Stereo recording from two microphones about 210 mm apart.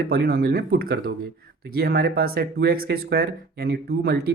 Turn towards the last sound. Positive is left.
turn(degrees=-50)  # may be behind; listen again after turning